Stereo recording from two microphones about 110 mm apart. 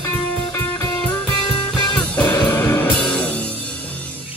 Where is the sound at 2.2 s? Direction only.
20° left (ahead or behind).